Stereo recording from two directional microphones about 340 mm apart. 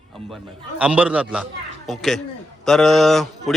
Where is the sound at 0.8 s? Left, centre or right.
Centre.